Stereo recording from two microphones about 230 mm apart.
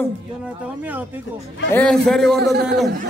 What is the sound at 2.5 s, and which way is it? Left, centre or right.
Speech, right.